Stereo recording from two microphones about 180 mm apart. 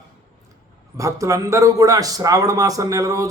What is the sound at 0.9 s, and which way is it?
A man's voice, 15° right (ahead or behind).